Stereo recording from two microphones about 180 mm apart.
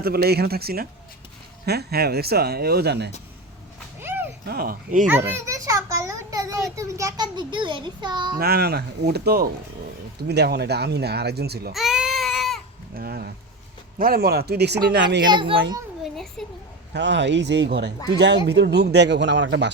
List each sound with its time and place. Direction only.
0.0 s speech: 60° right (ahead or behind)
4.0 s music: 10° right (ahead or behind)
4.4 s speech: 55° right (ahead or behind)
5.5 s a child's voice: 20° right (ahead or behind)
8.4 s speech: 60° right (ahead or behind)
11.7 s baby cry: centre (ahead or behind)
13.0 s speech: 60° right (ahead or behind)
15.3 s a child's voice: 30° right (ahead or behind)
16.1 s a sound: centre (ahead or behind)
16.9 s speech: 75° right (ahead or behind)